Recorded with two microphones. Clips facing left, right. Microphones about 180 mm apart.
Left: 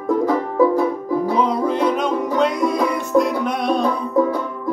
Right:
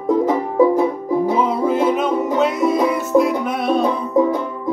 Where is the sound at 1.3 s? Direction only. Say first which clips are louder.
Right 1 dB; 5° right (ahead or behind).